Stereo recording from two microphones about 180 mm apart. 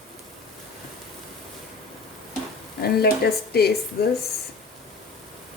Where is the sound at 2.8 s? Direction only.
60° left (ahead or behind).